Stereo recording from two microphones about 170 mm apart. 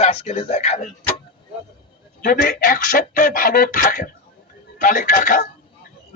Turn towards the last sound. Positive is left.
turn(degrees=50)  # may be behind; listen again after turning